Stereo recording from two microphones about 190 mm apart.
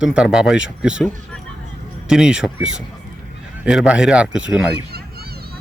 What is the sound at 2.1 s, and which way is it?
A man's voice, 5° right (ahead or behind).